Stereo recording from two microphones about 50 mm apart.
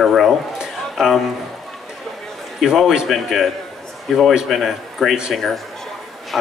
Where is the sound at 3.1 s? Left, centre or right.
Centre.